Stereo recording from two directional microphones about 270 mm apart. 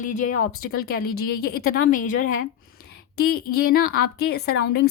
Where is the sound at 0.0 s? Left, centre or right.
Left.